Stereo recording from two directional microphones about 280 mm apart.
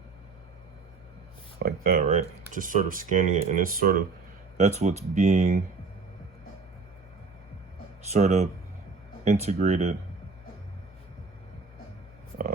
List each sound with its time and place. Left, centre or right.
1.5 s speech: right
8.1 s speech: right